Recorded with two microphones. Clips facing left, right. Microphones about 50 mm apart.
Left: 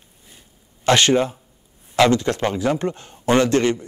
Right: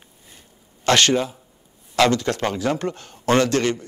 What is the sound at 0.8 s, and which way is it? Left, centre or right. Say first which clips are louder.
Speech: left 2 dB; left.